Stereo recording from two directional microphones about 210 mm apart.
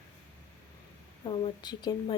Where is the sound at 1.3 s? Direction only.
20° left (ahead or behind).